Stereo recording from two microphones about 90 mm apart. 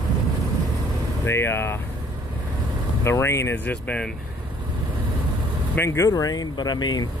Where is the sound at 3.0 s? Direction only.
30° left (ahead or behind).